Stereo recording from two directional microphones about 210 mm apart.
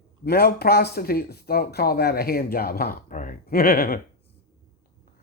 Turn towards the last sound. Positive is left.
turn(degrees=45)  # may be behind; listen again after turning